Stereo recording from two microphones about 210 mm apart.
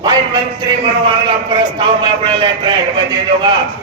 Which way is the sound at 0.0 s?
20° right (ahead or behind).